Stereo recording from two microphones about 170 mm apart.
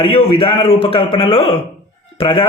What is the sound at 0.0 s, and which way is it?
A man's voice, 35° left (ahead or behind).